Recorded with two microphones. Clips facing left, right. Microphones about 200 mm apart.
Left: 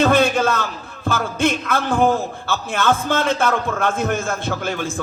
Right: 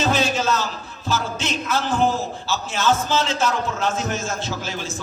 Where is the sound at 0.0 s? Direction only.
55° left (ahead or behind).